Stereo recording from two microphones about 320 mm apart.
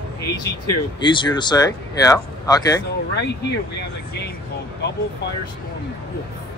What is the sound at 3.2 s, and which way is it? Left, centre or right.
Speech, left.